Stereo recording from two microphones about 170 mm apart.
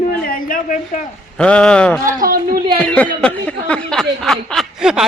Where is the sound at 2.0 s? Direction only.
60° right (ahead or behind).